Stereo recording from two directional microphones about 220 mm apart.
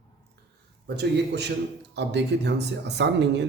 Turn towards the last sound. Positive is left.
turn(degrees=-50)  # may be behind; listen again after turning